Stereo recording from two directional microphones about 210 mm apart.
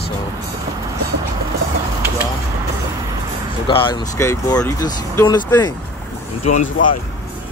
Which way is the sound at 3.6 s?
25° left (ahead or behind).